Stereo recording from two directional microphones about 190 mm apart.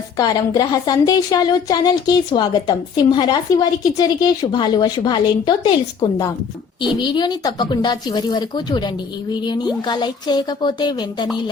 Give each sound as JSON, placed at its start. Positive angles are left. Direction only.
{"t": 0.2, "sound": "a woman's voice", "side_deg": 20}